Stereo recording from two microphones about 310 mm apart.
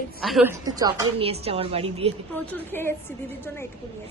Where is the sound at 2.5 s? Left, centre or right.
Centre.